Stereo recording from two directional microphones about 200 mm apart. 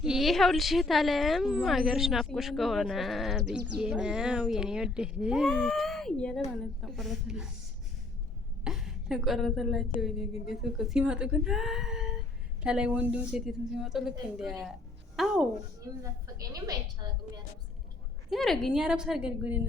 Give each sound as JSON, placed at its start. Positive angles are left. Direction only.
{"t": 0.0, "sound": "a woman's voice", "side_deg": 0}
{"t": 8.6, "sound": "a woman's voice", "side_deg": 0}
{"t": 16.4, "sound": "a woman's voice", "side_deg": -20}
{"t": 18.3, "sound": "a woman's voice", "side_deg": 0}